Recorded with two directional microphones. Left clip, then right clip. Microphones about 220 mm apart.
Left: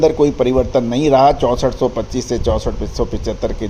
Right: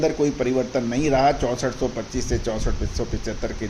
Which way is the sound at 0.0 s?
30° left (ahead or behind).